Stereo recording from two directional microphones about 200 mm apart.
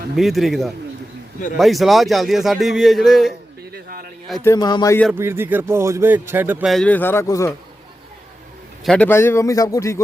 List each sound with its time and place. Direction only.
0.2 s a man's voice: centre (ahead or behind)
3.7 s a sound: 45° right (ahead or behind)
4.4 s speech: 20° left (ahead or behind)
5.1 s speech: 10° right (ahead or behind); by 7.5 s 15° left (ahead or behind)
8.8 s a man's voice: 5° left (ahead or behind)